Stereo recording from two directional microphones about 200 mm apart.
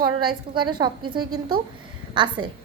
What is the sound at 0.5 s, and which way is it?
A woman's voice, 25° right (ahead or behind).